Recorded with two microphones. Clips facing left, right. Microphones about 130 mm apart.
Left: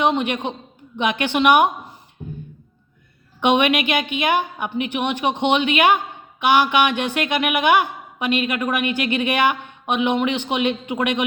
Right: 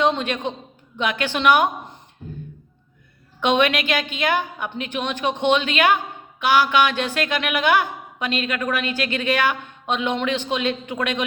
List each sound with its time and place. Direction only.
0.0 s a woman's voice: 15° left (ahead or behind)
3.4 s a woman's voice: 15° left (ahead or behind)